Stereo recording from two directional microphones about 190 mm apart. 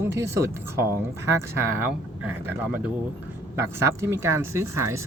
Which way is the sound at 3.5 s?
15° right (ahead or behind).